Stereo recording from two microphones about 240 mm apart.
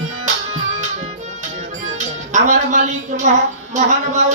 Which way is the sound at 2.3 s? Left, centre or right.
Right.